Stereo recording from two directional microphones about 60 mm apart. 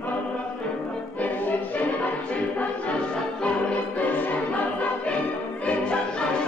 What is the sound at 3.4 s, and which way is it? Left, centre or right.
Music, left.